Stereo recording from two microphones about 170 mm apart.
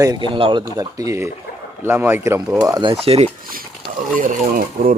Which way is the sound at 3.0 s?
35° right (ahead or behind).